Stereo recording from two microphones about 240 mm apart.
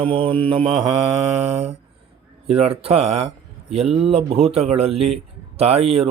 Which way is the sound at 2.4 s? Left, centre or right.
Right.